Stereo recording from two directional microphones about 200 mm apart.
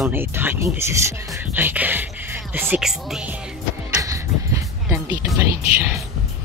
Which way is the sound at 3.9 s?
15° right (ahead or behind).